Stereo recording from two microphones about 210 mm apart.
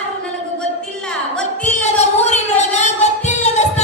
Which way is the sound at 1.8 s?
35° left (ahead or behind).